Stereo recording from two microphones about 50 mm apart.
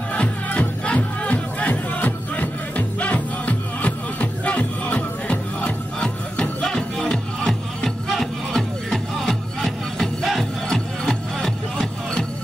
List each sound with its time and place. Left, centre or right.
0.1 s music: left
8.1 s music: centre